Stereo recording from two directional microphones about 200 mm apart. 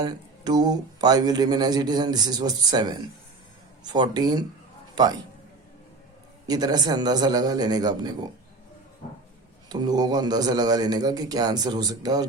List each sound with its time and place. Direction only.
0.0 s a man's voice: 20° right (ahead or behind)
6.5 s speech: 20° right (ahead or behind)
9.6 s speech: 20° right (ahead or behind)